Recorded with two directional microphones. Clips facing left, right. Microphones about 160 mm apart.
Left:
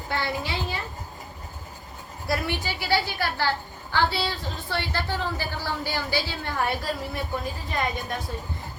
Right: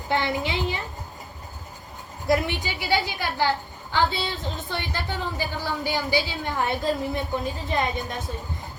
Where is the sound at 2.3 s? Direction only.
20° right (ahead or behind).